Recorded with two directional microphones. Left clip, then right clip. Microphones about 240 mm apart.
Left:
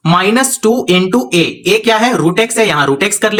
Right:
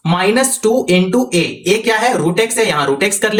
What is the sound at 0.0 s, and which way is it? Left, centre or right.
Speech, left.